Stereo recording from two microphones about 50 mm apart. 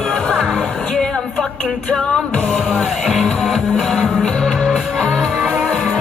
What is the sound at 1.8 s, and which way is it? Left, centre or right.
Music, centre.